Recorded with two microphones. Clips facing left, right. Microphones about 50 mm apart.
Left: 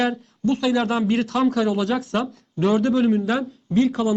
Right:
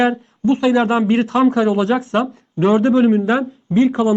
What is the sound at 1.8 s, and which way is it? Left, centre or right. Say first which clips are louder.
Speech: right 6 dB; centre.